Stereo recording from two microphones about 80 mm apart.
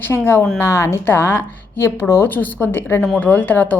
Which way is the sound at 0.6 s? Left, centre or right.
Left.